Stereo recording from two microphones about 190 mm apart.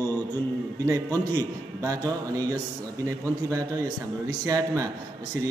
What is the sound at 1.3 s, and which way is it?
A man's voice, 15° right (ahead or behind).